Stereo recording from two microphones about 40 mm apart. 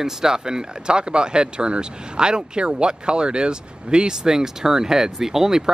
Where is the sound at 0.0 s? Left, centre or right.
Centre.